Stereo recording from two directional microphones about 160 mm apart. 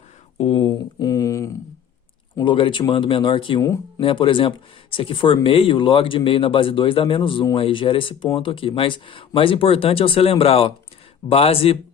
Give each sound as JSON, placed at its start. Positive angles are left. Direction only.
{"t": 0.3, "sound": "a sound", "side_deg": 40}
{"t": 2.4, "sound": "speech", "side_deg": 30}
{"t": 3.6, "sound": "speech", "side_deg": 20}
{"t": 4.0, "sound": "speech", "side_deg": 30}